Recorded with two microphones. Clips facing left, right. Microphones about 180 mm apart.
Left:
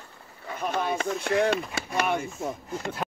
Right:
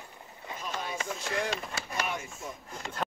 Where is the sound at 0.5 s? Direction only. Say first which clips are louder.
Left 9 dB; 60° left (ahead or behind).